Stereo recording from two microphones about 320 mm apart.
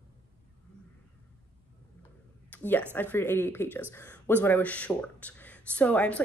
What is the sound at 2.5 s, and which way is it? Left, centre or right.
Speech, centre.